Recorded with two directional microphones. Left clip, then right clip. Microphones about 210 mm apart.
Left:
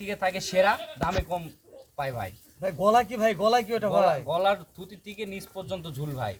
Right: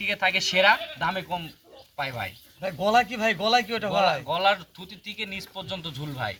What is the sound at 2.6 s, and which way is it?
A man's voice, 55° left (ahead or behind).